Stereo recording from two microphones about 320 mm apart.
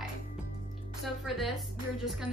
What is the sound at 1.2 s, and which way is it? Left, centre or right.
Speech, centre.